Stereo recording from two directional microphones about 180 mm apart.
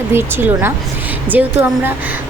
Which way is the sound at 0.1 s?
10° right (ahead or behind).